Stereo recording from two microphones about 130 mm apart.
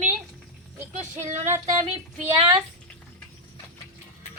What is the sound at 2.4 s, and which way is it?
Speech, 45° right (ahead or behind).